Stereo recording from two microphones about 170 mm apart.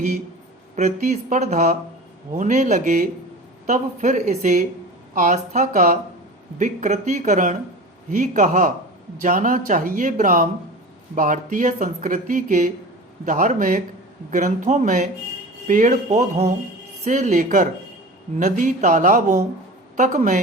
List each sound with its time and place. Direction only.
0.8 s speech: 45° right (ahead or behind)